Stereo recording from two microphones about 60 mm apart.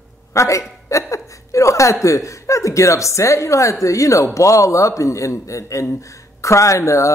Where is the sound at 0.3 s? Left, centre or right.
Left.